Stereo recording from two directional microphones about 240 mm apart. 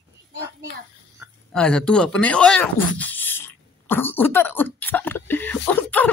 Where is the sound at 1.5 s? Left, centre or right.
Centre.